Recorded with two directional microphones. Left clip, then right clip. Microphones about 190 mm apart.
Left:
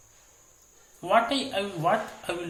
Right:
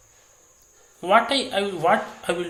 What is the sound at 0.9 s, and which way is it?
Speech, 20° right (ahead or behind).